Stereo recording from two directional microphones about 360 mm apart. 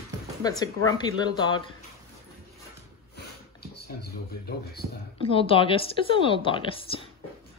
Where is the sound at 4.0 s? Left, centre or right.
Left.